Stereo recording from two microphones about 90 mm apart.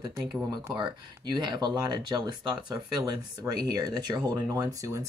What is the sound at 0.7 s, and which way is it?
Speech, 55° right (ahead or behind).